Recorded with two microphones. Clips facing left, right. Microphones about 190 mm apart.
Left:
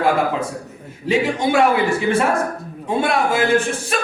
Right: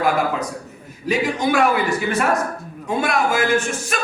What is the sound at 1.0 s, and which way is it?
A man's voice, 25° left (ahead or behind).